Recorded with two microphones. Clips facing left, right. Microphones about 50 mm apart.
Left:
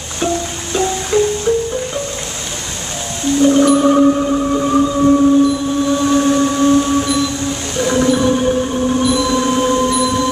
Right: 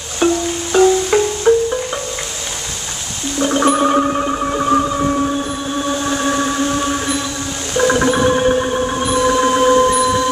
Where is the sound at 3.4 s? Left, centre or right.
Right.